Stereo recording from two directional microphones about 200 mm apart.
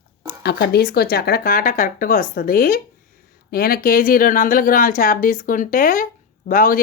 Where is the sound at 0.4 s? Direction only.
55° left (ahead or behind).